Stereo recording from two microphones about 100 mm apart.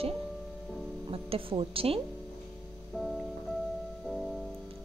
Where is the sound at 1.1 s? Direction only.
70° right (ahead or behind).